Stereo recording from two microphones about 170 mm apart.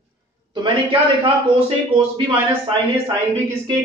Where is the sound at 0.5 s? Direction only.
30° right (ahead or behind).